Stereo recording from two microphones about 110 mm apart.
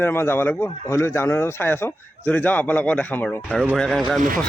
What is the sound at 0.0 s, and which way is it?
Speech, 20° left (ahead or behind).